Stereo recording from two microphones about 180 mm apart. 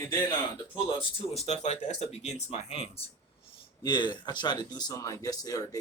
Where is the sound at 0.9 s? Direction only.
30° left (ahead or behind).